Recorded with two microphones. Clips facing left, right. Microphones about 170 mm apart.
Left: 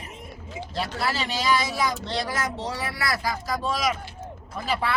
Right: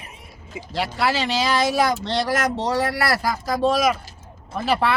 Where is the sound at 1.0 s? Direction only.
80° right.